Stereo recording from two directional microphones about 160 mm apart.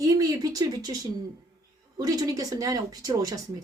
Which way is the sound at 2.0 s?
25° right (ahead or behind).